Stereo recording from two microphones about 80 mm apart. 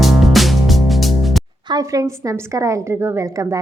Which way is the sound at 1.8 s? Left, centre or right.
Right.